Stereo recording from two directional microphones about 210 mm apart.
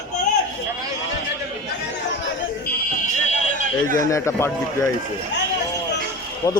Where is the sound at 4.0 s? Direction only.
15° left (ahead or behind).